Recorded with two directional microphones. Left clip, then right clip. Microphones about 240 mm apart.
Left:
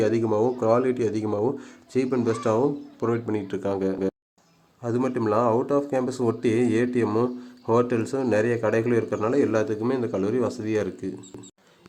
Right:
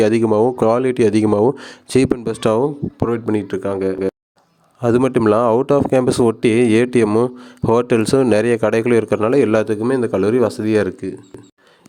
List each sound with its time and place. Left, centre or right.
0.0 s speech: right; by 4.1 s centre
4.8 s speech: right